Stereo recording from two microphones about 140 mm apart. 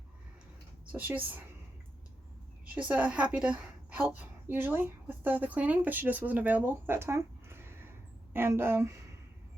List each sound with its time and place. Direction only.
0.9 s a woman's voice: 10° right (ahead or behind)
2.8 s a woman's voice: 10° right (ahead or behind)